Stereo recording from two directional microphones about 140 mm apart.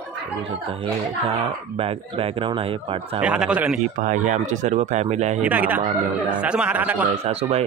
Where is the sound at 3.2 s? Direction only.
5° right (ahead or behind).